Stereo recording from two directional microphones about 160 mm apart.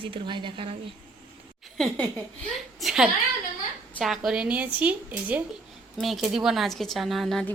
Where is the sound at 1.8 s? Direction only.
10° left (ahead or behind).